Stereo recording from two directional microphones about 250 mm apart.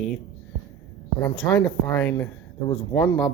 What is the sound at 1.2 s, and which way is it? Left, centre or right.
Speech, centre.